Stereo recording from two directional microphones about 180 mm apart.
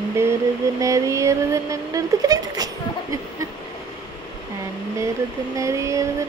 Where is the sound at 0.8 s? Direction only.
15° right (ahead or behind).